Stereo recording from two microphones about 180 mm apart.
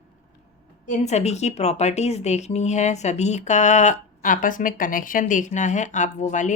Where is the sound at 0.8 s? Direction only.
40° left (ahead or behind).